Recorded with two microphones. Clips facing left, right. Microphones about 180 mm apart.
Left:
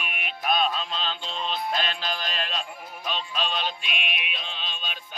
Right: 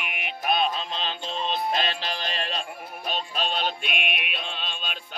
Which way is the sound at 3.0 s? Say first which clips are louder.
Right 1 dB; 45° right (ahead or behind).